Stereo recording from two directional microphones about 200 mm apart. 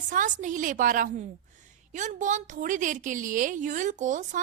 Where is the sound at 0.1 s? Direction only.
40° right (ahead or behind).